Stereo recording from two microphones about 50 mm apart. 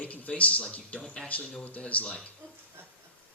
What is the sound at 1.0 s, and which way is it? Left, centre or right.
Speech, centre.